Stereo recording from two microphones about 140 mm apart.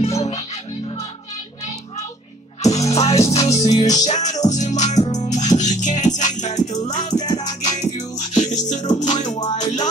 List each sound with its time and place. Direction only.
0.0 s music: 50° left (ahead or behind)
0.4 s music: 25° left (ahead or behind)
2.6 s music: 50° left (ahead or behind)
3.5 s music: 25° left (ahead or behind)
3.9 s music: 55° left (ahead or behind)
7.2 s music: 30° left (ahead or behind)
8.2 s music: 55° left (ahead or behind)